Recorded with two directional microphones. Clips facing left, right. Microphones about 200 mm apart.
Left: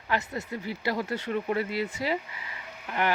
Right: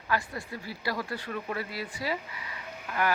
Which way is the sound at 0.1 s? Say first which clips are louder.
Left 2 dB; 20° left (ahead or behind).